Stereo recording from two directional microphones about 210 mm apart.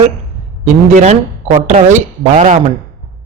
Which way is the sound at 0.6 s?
35° right (ahead or behind).